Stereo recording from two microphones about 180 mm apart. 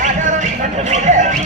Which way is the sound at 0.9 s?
40° right (ahead or behind).